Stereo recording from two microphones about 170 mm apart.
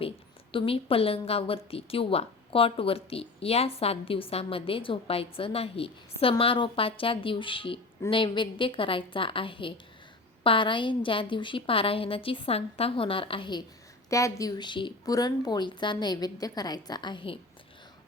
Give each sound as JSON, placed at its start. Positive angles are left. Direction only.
{"t": 0.5, "sound": "a woman's voice", "side_deg": 30}